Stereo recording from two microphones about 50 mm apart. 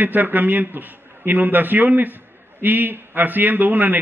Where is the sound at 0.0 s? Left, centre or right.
Right.